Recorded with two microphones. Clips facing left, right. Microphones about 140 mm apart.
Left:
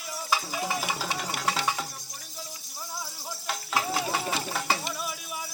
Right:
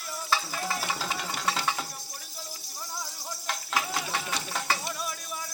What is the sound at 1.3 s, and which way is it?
Music, 10° left (ahead or behind).